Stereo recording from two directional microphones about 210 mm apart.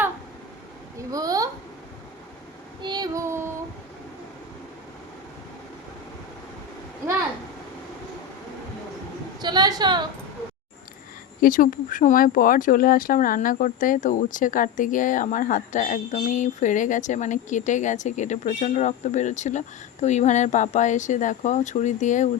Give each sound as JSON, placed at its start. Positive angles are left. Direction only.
{"t": 0.9, "sound": "a sound", "side_deg": -15}
{"t": 2.8, "sound": "child singing", "side_deg": -20}
{"t": 9.4, "sound": "a woman's voice", "side_deg": -20}
{"t": 11.3, "sound": "speech", "side_deg": 40}